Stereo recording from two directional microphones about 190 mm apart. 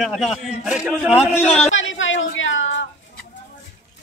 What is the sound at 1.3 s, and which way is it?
Speech, 35° left (ahead or behind).